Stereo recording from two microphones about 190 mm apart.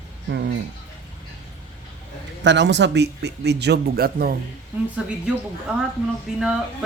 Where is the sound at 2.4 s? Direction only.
70° right (ahead or behind); by 4.3 s 55° right (ahead or behind).